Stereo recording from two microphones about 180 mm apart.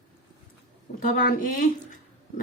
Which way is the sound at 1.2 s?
50° left (ahead or behind).